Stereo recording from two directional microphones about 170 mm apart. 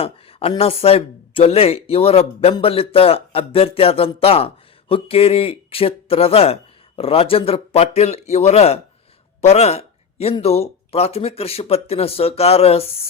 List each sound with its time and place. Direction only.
0.0 s speech: 35° left (ahead or behind)